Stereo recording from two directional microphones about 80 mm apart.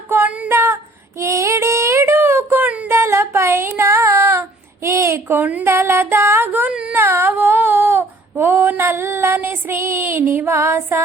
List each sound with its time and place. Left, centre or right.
0.1 s female singing: right
0.5 s female singing: right
1.2 s child singing: right; by 2.9 s centre
2.9 s child singing: right
5.6 s music: right
6.7 s a sound: centre
6.9 s a sound: right